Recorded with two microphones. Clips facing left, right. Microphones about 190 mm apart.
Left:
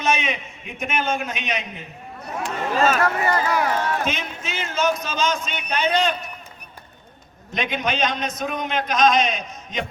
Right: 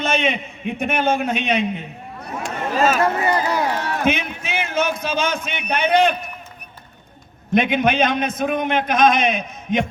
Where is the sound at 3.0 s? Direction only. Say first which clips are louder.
Right 2 dB; 20° right (ahead or behind).